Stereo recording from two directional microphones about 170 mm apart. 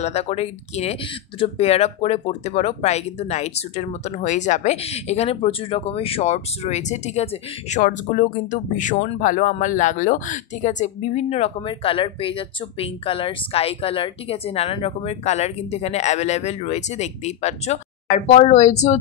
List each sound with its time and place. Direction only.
0.0 s speech: 40° left (ahead or behind)